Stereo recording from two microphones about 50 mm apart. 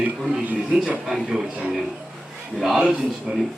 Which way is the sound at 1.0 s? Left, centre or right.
Centre.